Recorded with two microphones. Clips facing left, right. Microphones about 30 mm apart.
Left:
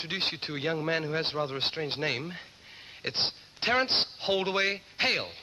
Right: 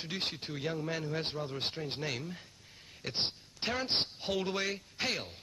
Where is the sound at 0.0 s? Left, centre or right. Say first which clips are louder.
Left 6 dB; left.